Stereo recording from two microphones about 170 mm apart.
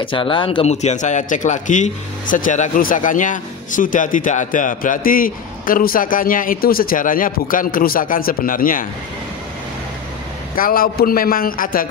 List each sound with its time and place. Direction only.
0.0 s speech: 30° left (ahead or behind); by 8.8 s 55° left (ahead or behind)
10.5 s a man's voice: 55° left (ahead or behind)